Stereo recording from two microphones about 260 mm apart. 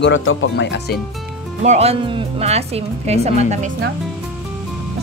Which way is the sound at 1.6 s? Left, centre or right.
Right.